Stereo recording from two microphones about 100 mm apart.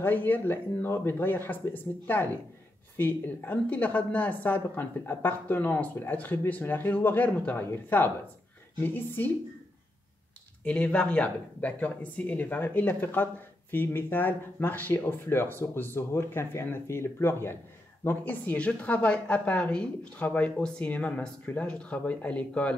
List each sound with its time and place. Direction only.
0.0 s speech: 20° left (ahead or behind)
10.6 s speech: 10° left (ahead or behind)